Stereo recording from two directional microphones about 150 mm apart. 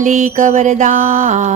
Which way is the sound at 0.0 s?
55° right (ahead or behind).